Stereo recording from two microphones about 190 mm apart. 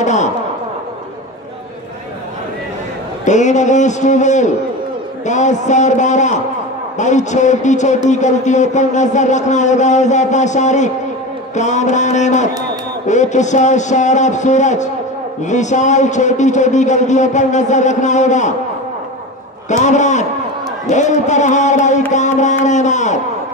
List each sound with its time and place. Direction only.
0.0 s a sound: 40° left (ahead or behind)
3.3 s a man's voice: 40° left (ahead or behind)
19.7 s a man's voice: 40° left (ahead or behind)